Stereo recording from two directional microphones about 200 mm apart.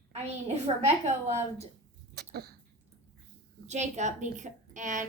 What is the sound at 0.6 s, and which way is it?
A woman's voice, 35° right (ahead or behind).